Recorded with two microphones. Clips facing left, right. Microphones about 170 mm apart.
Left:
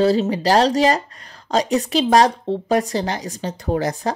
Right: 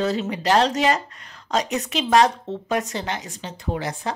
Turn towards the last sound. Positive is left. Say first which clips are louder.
# left 6 dB
turn(degrees=40)  # may be behind; listen again after turning